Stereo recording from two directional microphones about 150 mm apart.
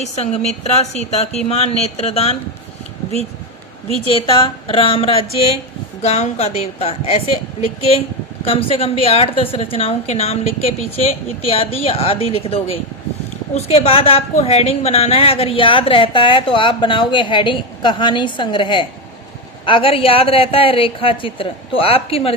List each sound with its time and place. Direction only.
0.0 s a woman's voice: 45° left (ahead or behind)
4.1 s a woman's voice: 35° left (ahead or behind)